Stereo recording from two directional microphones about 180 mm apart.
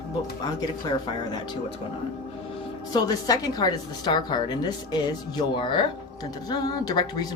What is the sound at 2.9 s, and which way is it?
A woman's voice, 20° left (ahead or behind).